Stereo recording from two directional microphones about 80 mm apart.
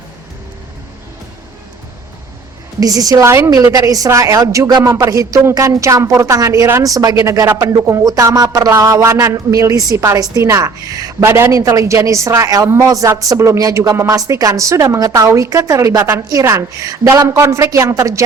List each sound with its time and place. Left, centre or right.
2.8 s speech: right
3.2 s a woman's voice: right
3.5 s speech: right
11.2 s a woman's voice: right
11.6 s a woman's voice: right
16.8 s a woman's voice: right